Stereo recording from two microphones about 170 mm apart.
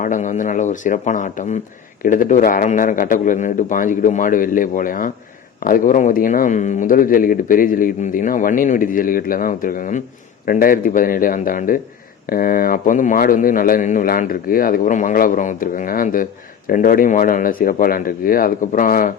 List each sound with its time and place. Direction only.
0.0 s a man's voice: 50° left (ahead or behind)